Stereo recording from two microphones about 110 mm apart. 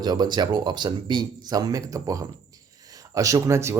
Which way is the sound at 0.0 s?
40° right (ahead or behind).